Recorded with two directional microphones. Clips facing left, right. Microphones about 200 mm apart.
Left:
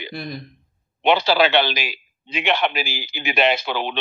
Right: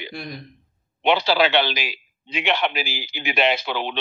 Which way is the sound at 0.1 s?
5° left (ahead or behind).